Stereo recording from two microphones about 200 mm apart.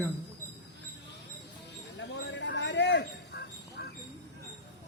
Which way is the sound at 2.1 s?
60° left (ahead or behind).